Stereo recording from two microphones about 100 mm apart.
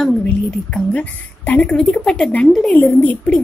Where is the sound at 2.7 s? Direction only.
15° left (ahead or behind).